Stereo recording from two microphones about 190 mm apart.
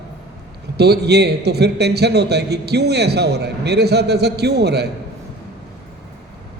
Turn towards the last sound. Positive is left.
turn(degrees=-60)  # may be behind; listen again after turning